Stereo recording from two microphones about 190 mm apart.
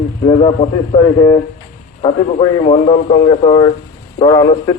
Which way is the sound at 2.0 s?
30° left (ahead or behind).